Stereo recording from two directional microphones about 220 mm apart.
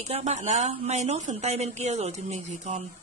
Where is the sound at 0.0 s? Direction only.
30° right (ahead or behind).